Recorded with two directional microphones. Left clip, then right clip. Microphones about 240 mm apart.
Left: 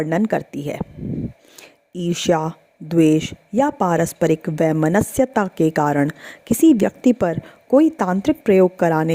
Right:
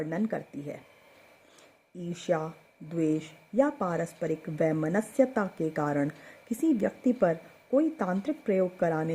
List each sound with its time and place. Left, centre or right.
0.0 s a woman's voice: left
2.0 s a woman's voice: left